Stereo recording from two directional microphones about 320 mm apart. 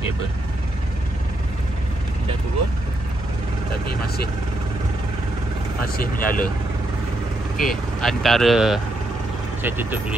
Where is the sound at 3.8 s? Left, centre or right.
Left.